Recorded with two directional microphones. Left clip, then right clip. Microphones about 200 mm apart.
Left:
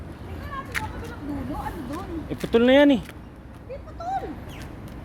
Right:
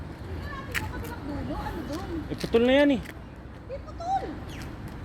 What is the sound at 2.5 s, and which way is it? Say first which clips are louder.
Speech: left 4 dB; 25° left (ahead or behind).